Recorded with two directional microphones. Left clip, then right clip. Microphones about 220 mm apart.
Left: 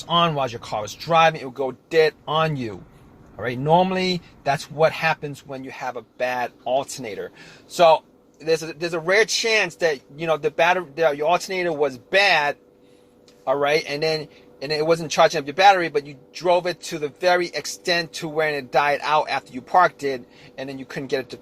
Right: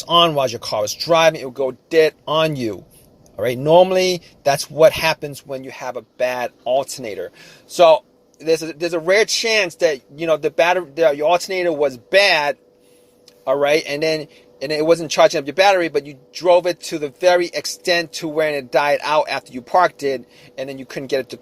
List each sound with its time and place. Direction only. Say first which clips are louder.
0.1 s a man's voice: right 6 dB; 45° right (ahead or behind)